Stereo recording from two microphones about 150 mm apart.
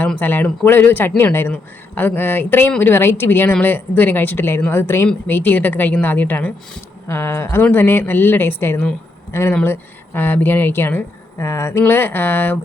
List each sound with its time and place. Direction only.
0.0 s speech: 10° left (ahead or behind)